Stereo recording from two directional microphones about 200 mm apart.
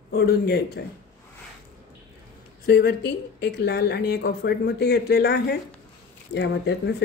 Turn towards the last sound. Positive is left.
turn(degrees=60)  # may be behind; listen again after turning